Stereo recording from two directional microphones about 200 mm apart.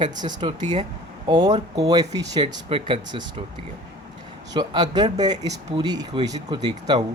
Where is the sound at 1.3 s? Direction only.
20° right (ahead or behind).